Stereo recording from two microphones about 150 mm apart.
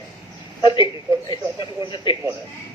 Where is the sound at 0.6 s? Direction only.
30° left (ahead or behind).